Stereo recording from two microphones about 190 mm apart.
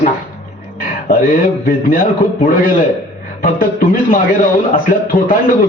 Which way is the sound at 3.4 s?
50° left (ahead or behind).